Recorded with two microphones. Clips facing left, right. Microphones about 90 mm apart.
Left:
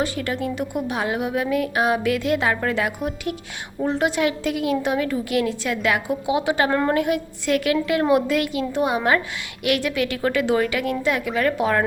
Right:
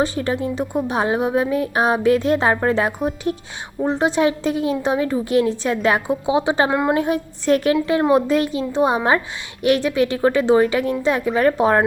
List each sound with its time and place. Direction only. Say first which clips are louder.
0.0 s a woman's voice: right 4 dB; 30° right (ahead or behind)
6.7 s a woman's voice: right 2 dB; 10° right (ahead or behind)
6.9 s a woman's voice: right 2 dB; 30° right (ahead or behind)